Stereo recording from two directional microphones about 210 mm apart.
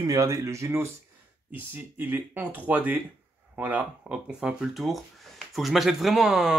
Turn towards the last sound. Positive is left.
turn(degrees=0)  # may be behind; listen again after turning